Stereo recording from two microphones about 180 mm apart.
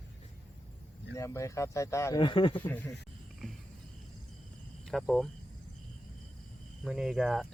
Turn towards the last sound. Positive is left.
turn(degrees=0)  # may be behind; listen again after turning